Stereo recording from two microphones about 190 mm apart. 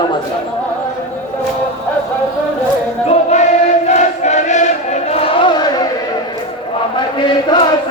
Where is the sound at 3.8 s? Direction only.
35° left (ahead or behind); by 5.9 s 20° left (ahead or behind).